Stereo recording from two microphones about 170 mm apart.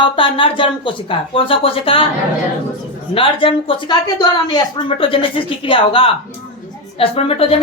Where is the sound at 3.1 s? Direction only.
30° left (ahead or behind).